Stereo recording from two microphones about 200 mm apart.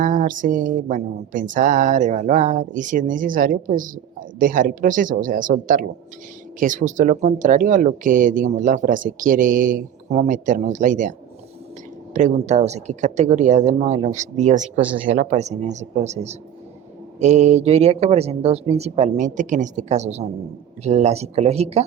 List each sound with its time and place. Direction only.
0.0 s speech: 40° right (ahead or behind)
12.1 s speech: 35° right (ahead or behind)